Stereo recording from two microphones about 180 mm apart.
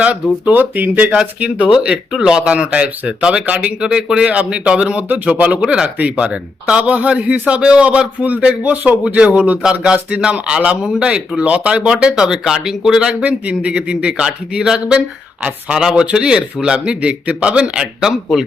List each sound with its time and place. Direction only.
0.0 s a man's voice: 10° right (ahead or behind)